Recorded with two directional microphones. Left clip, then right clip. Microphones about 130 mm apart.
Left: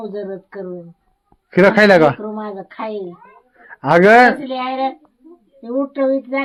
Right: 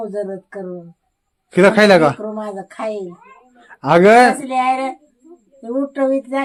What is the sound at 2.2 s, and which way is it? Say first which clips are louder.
Speech: right 1 dB; centre (ahead or behind).